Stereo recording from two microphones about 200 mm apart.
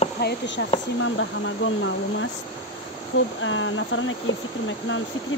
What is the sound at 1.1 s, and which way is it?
Speech, 75° left (ahead or behind).